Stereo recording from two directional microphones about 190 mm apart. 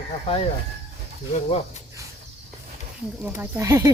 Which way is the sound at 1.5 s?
35° left (ahead or behind).